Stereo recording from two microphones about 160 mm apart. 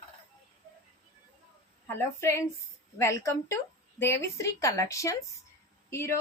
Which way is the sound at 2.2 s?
15° left (ahead or behind).